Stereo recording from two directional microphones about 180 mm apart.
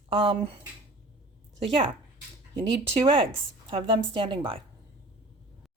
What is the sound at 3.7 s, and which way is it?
Speech, 25° right (ahead or behind).